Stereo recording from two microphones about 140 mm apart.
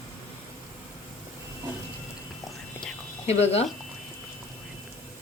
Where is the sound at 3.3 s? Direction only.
50° left (ahead or behind).